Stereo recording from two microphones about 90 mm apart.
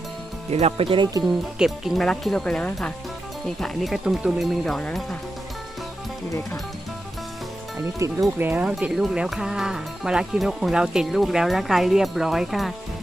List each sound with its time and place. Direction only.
0.8 s speech: 90° right
1.2 s speech: 5° right (ahead or behind)
2.0 s speech: 5° left (ahead or behind)
8.0 s speech: 35° right (ahead or behind)
8.4 s speech: 20° right (ahead or behind)
9.0 s speech: 5° right (ahead or behind)